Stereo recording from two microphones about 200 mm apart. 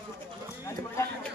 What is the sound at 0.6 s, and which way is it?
Speech, 15° left (ahead or behind).